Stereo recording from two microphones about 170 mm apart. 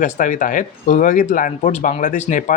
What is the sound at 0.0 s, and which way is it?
Speech, 45° left (ahead or behind).